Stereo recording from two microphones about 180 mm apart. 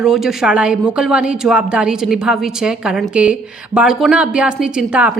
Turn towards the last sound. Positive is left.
turn(degrees=-5)  # may be behind; listen again after turning